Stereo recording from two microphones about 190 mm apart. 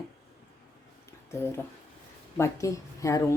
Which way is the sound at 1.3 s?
15° left (ahead or behind).